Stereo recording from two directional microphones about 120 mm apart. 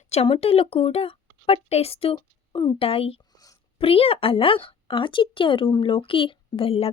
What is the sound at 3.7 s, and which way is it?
Speech, 50° left (ahead or behind).